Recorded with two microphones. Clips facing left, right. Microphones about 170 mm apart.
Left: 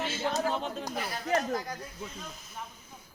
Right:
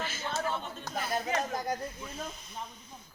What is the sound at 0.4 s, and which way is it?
Speech, 90° left.